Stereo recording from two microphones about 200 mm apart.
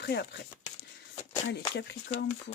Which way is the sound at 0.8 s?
30° left (ahead or behind).